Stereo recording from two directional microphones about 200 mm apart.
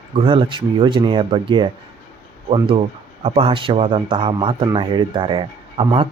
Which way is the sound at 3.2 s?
30° right (ahead or behind).